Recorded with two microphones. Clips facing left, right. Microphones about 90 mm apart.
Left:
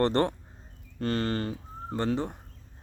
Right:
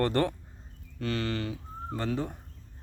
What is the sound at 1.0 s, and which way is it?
Speech, 40° left (ahead or behind).